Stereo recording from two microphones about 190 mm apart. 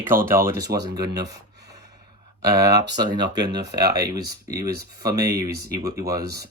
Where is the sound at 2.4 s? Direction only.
60° right (ahead or behind).